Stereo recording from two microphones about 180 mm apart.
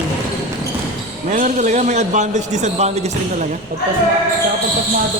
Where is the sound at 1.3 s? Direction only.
45° right (ahead or behind).